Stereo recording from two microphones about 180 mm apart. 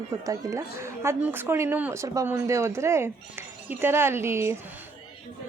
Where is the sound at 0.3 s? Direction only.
20° right (ahead or behind).